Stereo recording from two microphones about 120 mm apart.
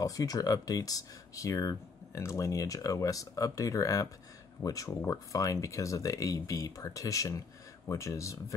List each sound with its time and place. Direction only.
0.0 s speech: 30° left (ahead or behind)